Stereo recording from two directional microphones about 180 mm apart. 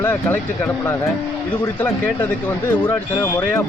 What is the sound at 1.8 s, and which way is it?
Speech, 10° left (ahead or behind).